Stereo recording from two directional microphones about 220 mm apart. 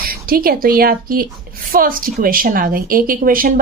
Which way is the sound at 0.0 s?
40° right (ahead or behind).